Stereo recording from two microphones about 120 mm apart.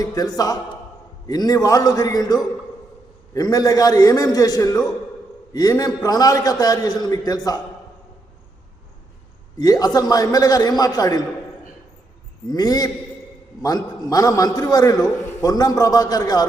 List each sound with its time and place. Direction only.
0.0 s a man's voice: 30° left (ahead or behind)
9.6 s a man's voice: 30° left (ahead or behind)
12.5 s a man's voice: 35° left (ahead or behind)